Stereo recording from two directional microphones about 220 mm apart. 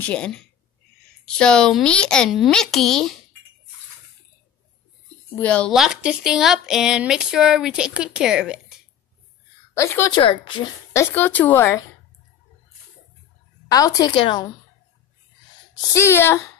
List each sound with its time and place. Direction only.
0.0 s speech: 5° left (ahead or behind)
5.3 s speech: 5° left (ahead or behind)
9.8 s speech: 15° left (ahead or behind)
10.9 s speech: 10° left (ahead or behind)
13.7 s speech: 15° left (ahead or behind)
15.9 s speech: 10° left (ahead or behind)